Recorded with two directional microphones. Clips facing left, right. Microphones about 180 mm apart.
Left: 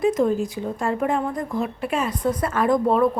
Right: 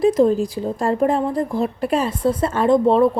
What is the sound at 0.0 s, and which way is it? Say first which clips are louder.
A woman's voice: right 5 dB; 35° right (ahead or behind).